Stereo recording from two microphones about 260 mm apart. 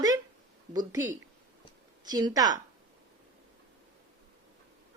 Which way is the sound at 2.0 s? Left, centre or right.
Centre.